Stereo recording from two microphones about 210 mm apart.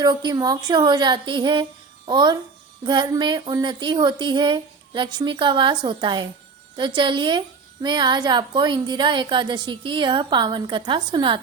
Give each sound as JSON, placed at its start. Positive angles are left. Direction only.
{"t": 0.0, "sound": "a woman's voice", "side_deg": -20}